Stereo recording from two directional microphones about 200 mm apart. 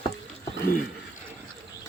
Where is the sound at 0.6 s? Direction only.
45° left (ahead or behind).